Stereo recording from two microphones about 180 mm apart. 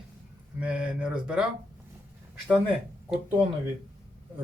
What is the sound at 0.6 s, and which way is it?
Speech, 5° right (ahead or behind).